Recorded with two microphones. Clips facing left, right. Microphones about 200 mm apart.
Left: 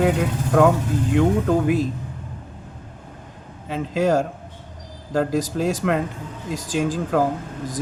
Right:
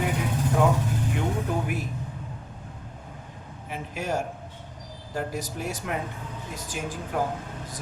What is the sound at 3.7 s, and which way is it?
Speech, 90° left.